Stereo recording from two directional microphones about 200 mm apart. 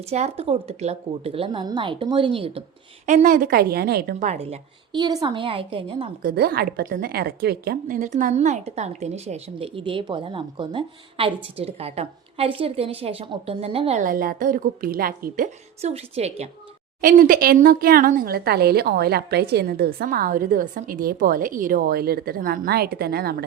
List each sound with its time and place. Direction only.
0.1 s a woman's voice: 30° right (ahead or behind)
3.1 s a woman's voice: 40° right (ahead or behind)
6.2 s a woman's voice: 50° right (ahead or behind); by 16.5 s 30° right (ahead or behind)
17.0 s speech: 45° right (ahead or behind)